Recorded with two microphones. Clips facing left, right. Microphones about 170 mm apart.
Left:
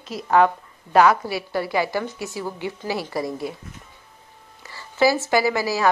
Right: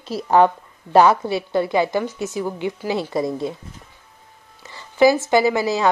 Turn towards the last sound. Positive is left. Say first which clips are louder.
# right 3 dB
turn(degrees=-20)  # may be behind; listen again after turning